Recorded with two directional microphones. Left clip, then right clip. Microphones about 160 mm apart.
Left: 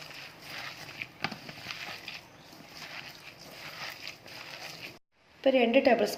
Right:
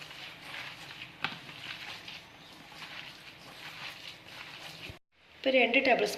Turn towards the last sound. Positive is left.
turn(degrees=55)  # may be behind; listen again after turning